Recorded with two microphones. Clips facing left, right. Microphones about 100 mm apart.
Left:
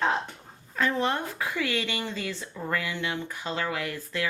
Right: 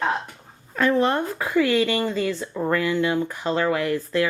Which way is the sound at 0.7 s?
50° right (ahead or behind).